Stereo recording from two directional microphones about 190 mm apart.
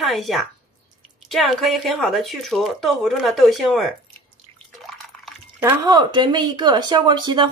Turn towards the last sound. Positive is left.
turn(degrees=-25)  # may be behind; listen again after turning